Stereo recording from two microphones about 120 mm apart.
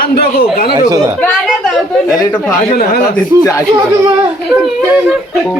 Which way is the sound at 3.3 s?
25° right (ahead or behind).